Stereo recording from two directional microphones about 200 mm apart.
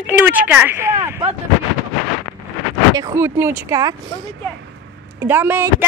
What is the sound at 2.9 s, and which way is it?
Speech, 15° right (ahead or behind).